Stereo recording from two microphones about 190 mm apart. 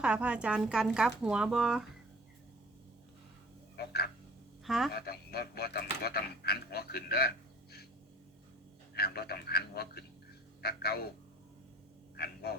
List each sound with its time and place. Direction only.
0.0 s speech: 5° right (ahead or behind)
3.8 s frog: 55° left (ahead or behind)
4.6 s a woman's voice: centre (ahead or behind)
4.9 s speech: 55° left (ahead or behind)
9.0 s speech: 55° left (ahead or behind)
12.1 s frog: 55° left (ahead or behind)